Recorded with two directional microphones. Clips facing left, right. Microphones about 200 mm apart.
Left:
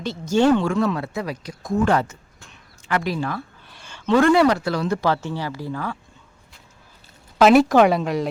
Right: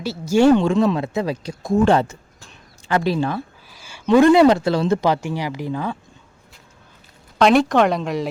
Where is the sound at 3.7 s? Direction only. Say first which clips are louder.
Right 3 dB; 5° right (ahead or behind).